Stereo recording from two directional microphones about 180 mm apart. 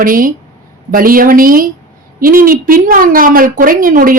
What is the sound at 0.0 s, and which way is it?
Speech, 50° right (ahead or behind).